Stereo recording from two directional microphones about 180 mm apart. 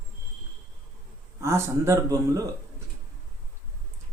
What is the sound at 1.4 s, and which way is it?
Speech, 15° right (ahead or behind).